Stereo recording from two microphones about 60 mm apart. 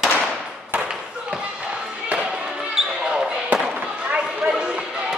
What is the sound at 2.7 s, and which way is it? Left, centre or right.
Basketball bounce, centre.